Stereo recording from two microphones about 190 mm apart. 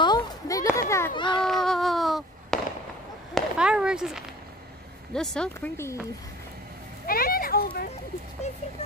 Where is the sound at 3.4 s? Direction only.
5° right (ahead or behind); by 6.0 s 10° left (ahead or behind).